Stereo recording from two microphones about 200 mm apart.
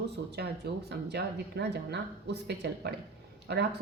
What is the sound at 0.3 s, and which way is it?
A woman's voice, 55° right (ahead or behind).